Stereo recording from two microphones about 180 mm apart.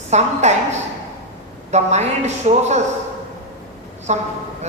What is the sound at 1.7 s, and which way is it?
A man's voice, 40° right (ahead or behind).